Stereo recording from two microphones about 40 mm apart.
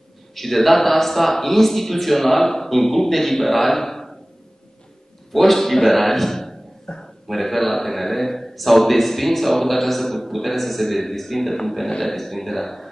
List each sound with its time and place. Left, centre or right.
0.3 s a man's voice: centre
5.3 s a man's voice: centre
7.2 s a man's voice: centre